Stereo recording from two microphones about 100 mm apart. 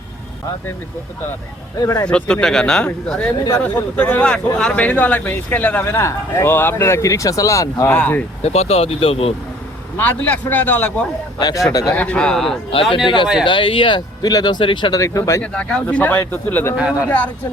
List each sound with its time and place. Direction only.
1.8 s speech: 40° left (ahead or behind)
2.0 s speech: 10° left (ahead or behind)
5.9 s speech: 30° left (ahead or behind)
7.9 s speech: 15° left (ahead or behind)
8.4 s speech: 90° left; by 9.3 s 70° left (ahead or behind)
10.0 s speech: 15° left (ahead or behind)
11.3 s speech: 40° left (ahead or behind)
11.9 s speech: 10° left (ahead or behind)
12.7 s speech: 65° left (ahead or behind)
14.9 s speech: 30° left (ahead or behind)
15.4 s speech: 10° left (ahead or behind)